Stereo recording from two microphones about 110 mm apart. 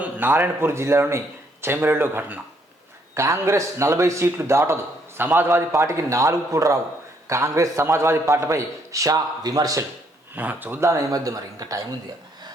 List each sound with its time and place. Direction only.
0.0 s a man's voice: 15° right (ahead or behind); by 9.8 s 35° right (ahead or behind)
10.3 s a man's voice: 15° right (ahead or behind); by 11.8 s 30° right (ahead or behind)